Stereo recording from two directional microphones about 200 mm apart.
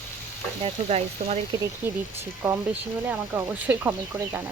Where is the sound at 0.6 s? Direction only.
30° right (ahead or behind).